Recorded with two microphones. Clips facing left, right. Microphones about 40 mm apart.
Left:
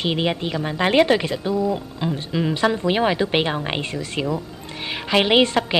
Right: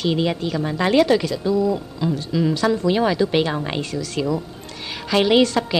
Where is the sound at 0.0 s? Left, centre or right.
Left.